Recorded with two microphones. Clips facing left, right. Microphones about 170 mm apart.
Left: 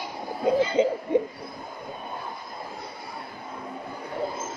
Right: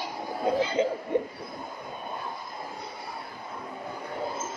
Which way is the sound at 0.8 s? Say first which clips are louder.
Left 4 dB; 20° left (ahead or behind).